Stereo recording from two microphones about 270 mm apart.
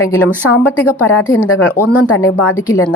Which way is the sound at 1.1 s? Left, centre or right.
Left.